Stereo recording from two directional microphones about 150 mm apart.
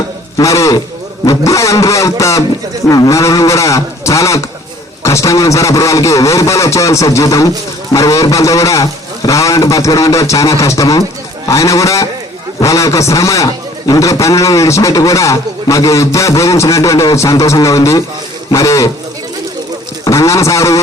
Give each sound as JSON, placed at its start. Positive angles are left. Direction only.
{"t": 0.3, "sound": "a man's voice", "side_deg": 20}
{"t": 20.1, "sound": "a man's voice", "side_deg": 20}